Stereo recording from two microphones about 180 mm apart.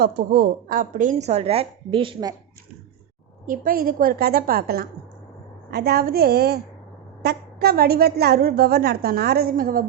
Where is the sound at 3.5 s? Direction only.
50° right (ahead or behind).